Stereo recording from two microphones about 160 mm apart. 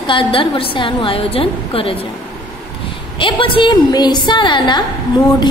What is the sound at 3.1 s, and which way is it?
A woman's voice, 30° left (ahead or behind).